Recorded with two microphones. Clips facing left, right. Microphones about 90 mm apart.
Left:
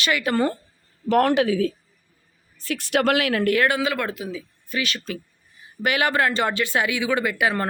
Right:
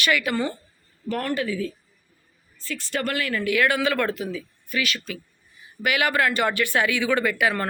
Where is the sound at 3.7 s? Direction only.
20° left (ahead or behind).